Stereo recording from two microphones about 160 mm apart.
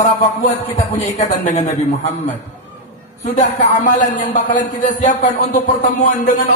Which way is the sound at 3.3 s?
50° left (ahead or behind).